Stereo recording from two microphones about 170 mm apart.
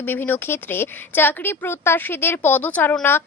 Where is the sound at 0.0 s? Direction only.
10° left (ahead or behind).